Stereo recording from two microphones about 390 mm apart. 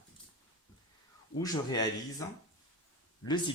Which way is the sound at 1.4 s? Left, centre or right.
Centre.